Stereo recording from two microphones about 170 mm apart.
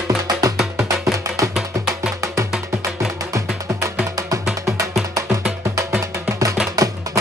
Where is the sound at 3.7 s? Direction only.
20° right (ahead or behind).